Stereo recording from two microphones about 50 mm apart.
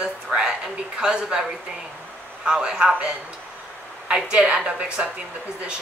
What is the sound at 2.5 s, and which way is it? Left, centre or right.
Speech, centre.